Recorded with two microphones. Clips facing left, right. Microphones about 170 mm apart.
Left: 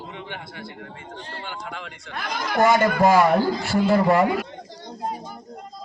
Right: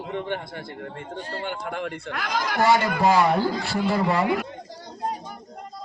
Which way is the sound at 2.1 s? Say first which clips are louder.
Even; 80° right.